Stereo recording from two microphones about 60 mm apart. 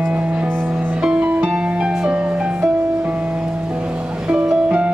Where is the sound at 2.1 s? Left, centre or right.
Right.